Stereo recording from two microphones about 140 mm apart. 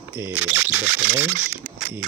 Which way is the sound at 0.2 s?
15° right (ahead or behind).